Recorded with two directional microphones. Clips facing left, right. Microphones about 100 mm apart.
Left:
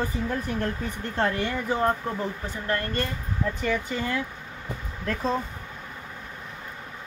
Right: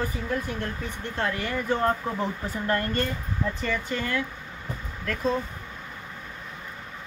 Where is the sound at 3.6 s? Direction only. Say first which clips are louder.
Left 2 dB; 10° left (ahead or behind).